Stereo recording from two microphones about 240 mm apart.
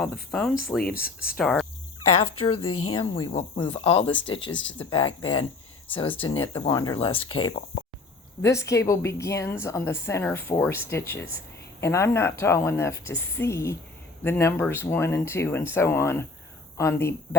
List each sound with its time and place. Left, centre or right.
0.0 s speech: centre
0.9 s speech: left
1.4 s speech: centre
2.6 s speech: left
2.9 s speech: left
7.2 s speech: left
8.4 s a woman's voice: centre